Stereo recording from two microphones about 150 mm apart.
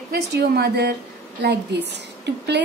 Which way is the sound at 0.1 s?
90° right.